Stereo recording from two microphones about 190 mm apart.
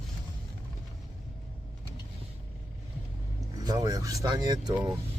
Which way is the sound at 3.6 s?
20° right (ahead or behind).